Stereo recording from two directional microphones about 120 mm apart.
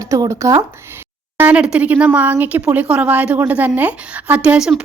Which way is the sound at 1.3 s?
15° right (ahead or behind).